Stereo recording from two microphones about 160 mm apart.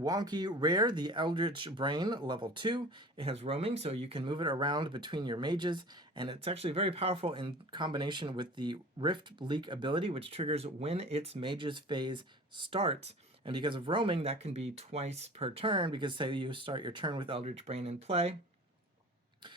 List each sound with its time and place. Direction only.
0.0 s speech: 25° right (ahead or behind); by 18.3 s 40° right (ahead or behind)